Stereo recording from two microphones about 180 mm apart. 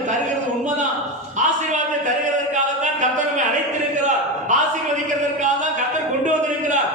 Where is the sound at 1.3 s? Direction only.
40° right (ahead or behind).